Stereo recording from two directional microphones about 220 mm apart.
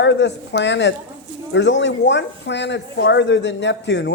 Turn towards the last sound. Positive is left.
turn(degrees=55)  # may be behind; listen again after turning